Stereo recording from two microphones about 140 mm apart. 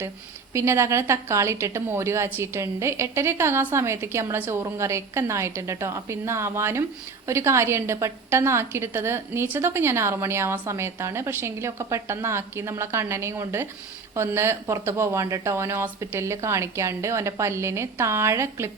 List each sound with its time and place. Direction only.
0.5 s a woman's voice: 20° right (ahead or behind)